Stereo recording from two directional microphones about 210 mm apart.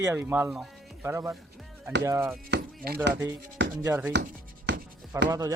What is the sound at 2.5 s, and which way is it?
Chopping, 45° right (ahead or behind).